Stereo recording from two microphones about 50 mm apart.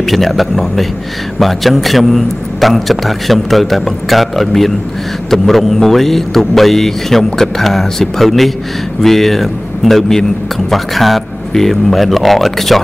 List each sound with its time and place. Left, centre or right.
0.0 s a man's voice: centre